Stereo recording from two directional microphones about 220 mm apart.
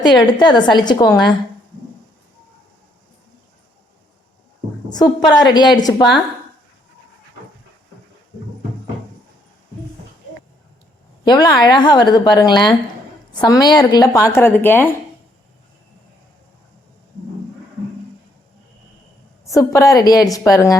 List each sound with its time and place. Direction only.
0.0 s a woman's voice: 20° left (ahead or behind)
4.9 s a woman's voice: 20° left (ahead or behind)
11.3 s a woman's voice: 20° left (ahead or behind)
19.5 s a woman's voice: 15° left (ahead or behind)